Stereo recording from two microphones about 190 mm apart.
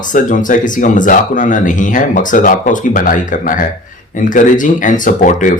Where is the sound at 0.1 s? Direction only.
45° left (ahead or behind).